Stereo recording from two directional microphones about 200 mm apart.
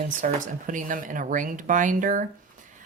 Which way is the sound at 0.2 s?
40° right (ahead or behind).